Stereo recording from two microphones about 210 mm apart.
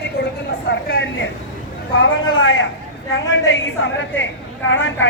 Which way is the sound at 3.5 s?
60° left (ahead or behind).